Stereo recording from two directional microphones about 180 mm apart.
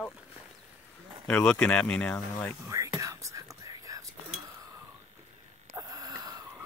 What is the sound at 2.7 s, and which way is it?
Whispering, 20° right (ahead or behind).